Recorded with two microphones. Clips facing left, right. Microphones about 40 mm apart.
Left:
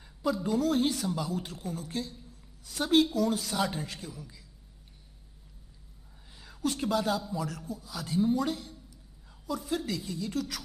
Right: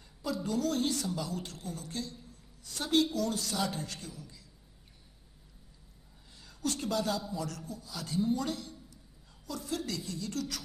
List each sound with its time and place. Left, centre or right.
0.2 s speech: centre
6.3 s a woman's voice: centre